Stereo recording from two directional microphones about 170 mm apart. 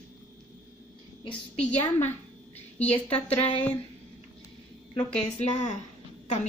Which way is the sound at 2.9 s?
35° left (ahead or behind).